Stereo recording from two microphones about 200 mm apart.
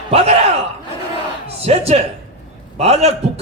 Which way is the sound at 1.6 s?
30° right (ahead or behind).